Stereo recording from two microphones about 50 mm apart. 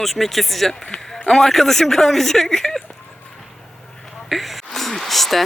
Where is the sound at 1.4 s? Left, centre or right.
Centre.